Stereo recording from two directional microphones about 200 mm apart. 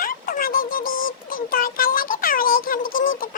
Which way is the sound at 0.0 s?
45° left (ahead or behind).